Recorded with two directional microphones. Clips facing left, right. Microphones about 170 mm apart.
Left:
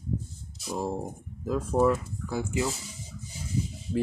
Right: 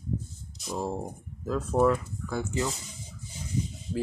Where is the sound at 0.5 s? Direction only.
5° left (ahead or behind).